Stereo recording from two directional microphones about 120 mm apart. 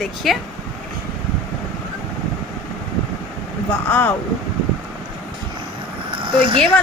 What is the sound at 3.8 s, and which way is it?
Speech, 15° left (ahead or behind).